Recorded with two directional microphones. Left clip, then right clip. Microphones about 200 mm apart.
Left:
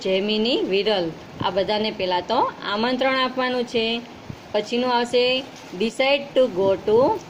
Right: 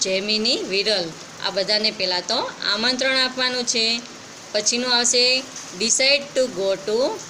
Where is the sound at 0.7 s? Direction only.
35° left (ahead or behind).